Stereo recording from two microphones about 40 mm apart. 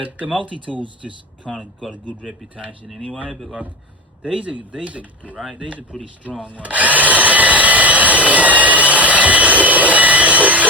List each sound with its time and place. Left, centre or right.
0.0 s speech: right
1.0 s speech: centre
1.5 s speech: centre
2.2 s speech: right
4.2 s speech: right